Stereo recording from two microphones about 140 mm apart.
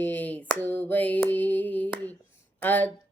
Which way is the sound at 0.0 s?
10° left (ahead or behind).